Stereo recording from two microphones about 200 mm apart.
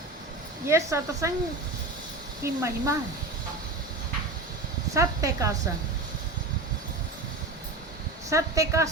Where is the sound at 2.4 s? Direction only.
15° right (ahead or behind).